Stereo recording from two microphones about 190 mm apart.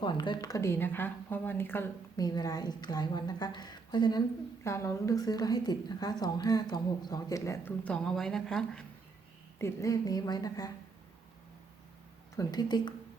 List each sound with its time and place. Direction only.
0.0 s a woman's voice: 25° left (ahead or behind); by 8.8 s 5° left (ahead or behind)
9.6 s speech: 15° left (ahead or behind)
12.4 s speech: 20° left (ahead or behind)